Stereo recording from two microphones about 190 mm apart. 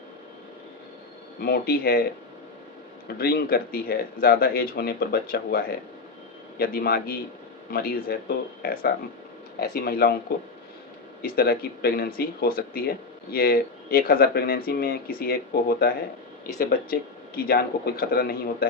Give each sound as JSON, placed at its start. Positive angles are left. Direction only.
{"t": 1.4, "sound": "speech", "side_deg": 50}
{"t": 3.2, "sound": "speech", "side_deg": 55}
{"t": 11.2, "sound": "speech", "side_deg": 55}